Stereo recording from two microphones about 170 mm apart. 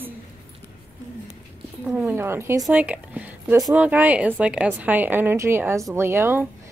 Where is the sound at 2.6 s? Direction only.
5° right (ahead or behind).